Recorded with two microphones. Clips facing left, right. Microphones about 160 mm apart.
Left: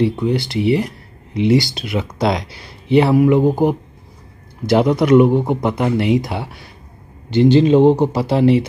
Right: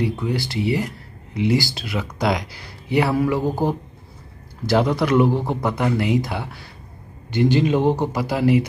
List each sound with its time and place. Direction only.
0.1 s speech: 20° left (ahead or behind)